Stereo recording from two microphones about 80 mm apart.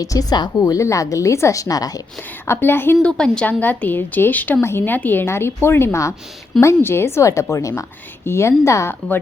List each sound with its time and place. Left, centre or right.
0.0 s a woman's voice: left
2.5 s speech: left
3.0 s a woman's voice: centre
3.6 s a woman's voice: left